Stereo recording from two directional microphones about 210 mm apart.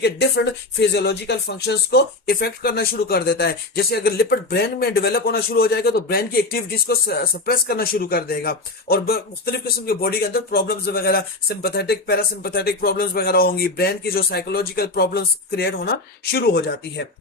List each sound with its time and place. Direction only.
0.0 s speech: 50° left (ahead or behind)